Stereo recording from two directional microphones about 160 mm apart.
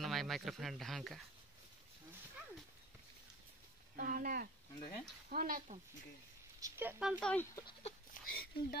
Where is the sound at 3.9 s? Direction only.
60° right (ahead or behind).